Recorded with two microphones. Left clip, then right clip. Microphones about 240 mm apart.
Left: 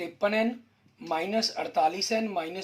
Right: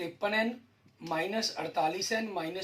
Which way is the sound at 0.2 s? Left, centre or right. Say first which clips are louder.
Left 4 dB; left.